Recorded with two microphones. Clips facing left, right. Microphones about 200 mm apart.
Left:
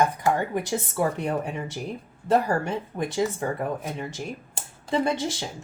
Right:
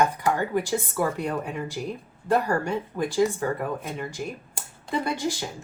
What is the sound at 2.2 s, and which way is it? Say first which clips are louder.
Speech: left 1 dB; 25° left (ahead or behind).